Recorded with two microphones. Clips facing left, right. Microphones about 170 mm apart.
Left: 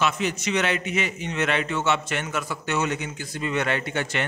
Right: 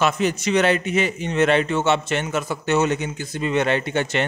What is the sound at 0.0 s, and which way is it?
A man's voice, 40° right (ahead or behind).